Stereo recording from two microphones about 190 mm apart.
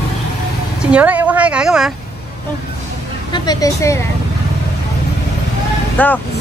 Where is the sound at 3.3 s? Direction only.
20° left (ahead or behind).